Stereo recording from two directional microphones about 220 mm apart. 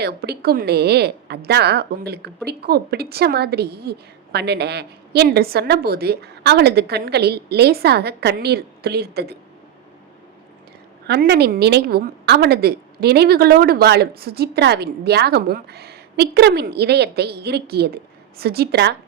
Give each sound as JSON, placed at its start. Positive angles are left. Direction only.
{"t": 0.0, "sound": "a woman's voice", "side_deg": -45}
{"t": 11.0, "sound": "a woman's voice", "side_deg": -50}